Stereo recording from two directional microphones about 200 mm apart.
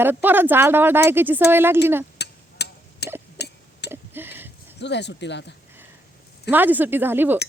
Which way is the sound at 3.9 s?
10° right (ahead or behind).